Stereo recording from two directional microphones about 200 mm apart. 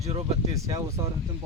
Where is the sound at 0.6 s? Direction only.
20° right (ahead or behind).